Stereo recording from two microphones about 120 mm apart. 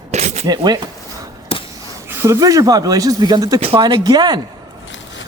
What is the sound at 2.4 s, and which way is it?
Speech, 30° right (ahead or behind).